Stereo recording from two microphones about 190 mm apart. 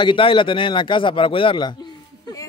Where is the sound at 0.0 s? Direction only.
25° left (ahead or behind).